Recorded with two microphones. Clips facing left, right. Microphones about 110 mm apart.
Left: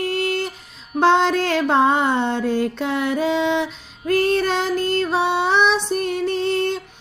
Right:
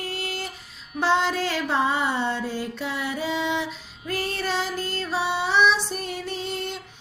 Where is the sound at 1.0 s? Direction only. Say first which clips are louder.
Left 6 dB; 70° left (ahead or behind).